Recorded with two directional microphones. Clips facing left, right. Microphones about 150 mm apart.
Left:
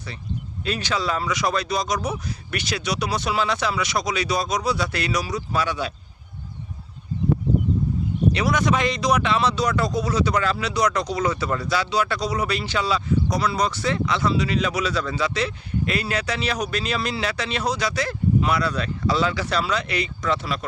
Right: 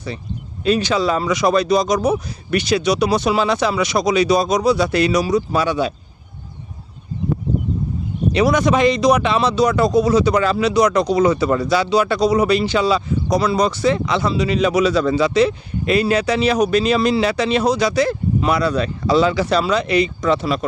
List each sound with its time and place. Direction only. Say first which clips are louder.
0.6 s speech: right 9 dB; 20° right (ahead or behind)
8.3 s speech: right 7 dB; 20° right (ahead or behind)